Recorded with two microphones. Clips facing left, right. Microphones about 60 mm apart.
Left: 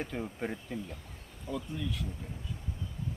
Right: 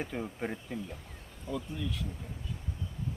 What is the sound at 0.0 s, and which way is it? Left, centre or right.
Speech, centre.